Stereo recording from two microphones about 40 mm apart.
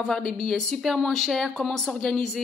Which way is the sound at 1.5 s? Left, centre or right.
Centre.